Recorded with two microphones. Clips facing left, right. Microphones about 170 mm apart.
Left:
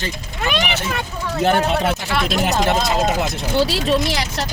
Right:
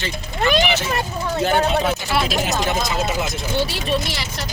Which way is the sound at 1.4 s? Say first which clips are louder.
Left 2 dB; 60° left (ahead or behind).